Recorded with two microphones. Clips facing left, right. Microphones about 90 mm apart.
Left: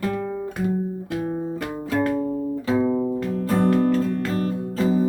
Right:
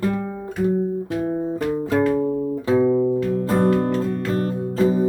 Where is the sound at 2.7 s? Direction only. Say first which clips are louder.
Right 5 dB; 5° left (ahead or behind).